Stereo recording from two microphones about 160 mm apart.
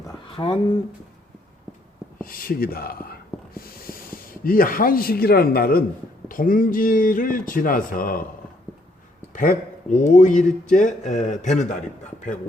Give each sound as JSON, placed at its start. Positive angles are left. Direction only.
{"t": 0.3, "sound": "speech", "side_deg": 30}
{"t": 2.2, "sound": "speech", "side_deg": 65}
{"t": 6.2, "sound": "speech", "side_deg": 60}
{"t": 9.3, "sound": "a man's voice", "side_deg": 55}